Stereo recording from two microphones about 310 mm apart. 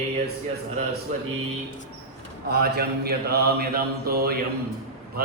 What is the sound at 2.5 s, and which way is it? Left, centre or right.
Mantra, right.